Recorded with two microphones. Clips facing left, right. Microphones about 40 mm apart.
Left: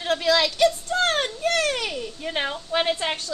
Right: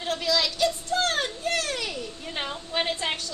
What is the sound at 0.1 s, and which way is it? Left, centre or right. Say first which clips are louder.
Children playing: left 5 dB; left.